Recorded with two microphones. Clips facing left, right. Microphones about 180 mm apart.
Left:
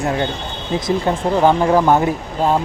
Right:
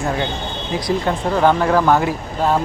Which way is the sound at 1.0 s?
15° left (ahead or behind).